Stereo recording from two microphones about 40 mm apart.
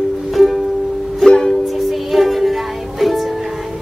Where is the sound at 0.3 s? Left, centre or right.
Centre.